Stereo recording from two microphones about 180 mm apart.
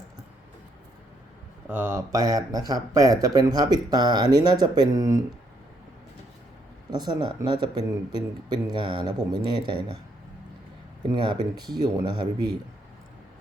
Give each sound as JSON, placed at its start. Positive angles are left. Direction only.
{"t": 1.6, "sound": "speech", "side_deg": -10}
{"t": 6.9, "sound": "speech", "side_deg": -25}
{"t": 11.1, "sound": "speech", "side_deg": -25}